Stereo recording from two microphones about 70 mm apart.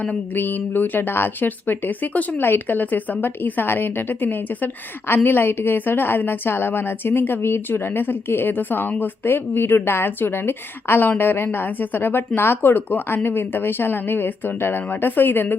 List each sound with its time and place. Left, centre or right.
0.0 s a woman's voice: left